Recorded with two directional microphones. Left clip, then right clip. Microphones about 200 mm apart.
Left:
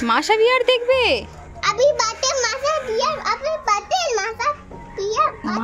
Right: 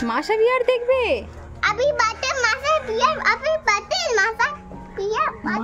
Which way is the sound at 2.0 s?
25° right (ahead or behind).